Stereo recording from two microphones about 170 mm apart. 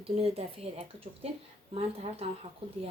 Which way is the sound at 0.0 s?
35° right (ahead or behind).